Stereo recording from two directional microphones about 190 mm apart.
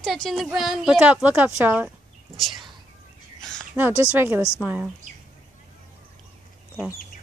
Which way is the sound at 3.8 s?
10° right (ahead or behind).